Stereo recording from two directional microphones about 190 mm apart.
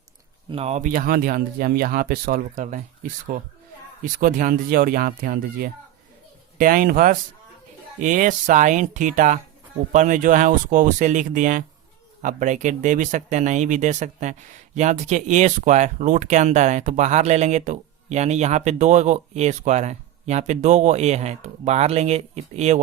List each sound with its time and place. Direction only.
0.5 s speech: 35° right (ahead or behind)